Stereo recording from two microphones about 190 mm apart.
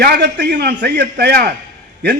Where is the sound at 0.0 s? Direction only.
60° right (ahead or behind).